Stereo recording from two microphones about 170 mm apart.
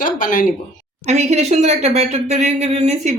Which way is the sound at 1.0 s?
40° right (ahead or behind).